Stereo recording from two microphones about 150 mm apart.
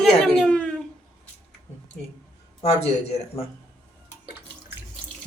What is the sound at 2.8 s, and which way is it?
Speech, 45° left (ahead or behind).